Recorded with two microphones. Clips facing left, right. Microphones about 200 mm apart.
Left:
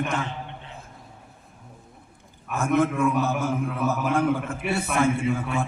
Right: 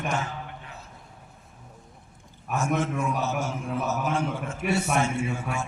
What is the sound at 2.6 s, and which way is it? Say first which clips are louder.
A man's voice: left 6 dB; 55° left (ahead or behind).